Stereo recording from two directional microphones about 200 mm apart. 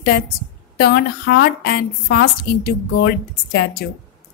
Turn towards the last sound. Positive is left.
turn(degrees=55)  # may be behind; listen again after turning